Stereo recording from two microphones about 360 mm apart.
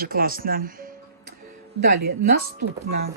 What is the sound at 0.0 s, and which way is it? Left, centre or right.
Speech, right.